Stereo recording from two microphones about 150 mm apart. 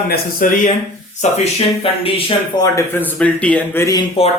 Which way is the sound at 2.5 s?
20° left (ahead or behind).